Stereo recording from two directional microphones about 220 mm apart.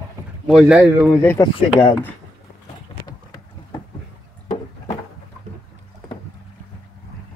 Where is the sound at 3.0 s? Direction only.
20° left (ahead or behind).